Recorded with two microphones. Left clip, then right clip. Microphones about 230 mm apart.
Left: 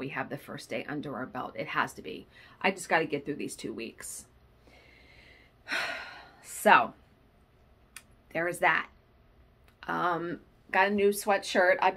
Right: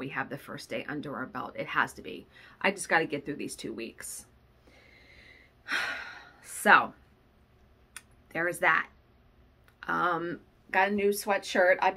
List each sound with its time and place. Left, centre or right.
0.0 s speech: centre
4.7 s gasp: centre
7.9 s computer keyboard: centre
9.8 s speech: centre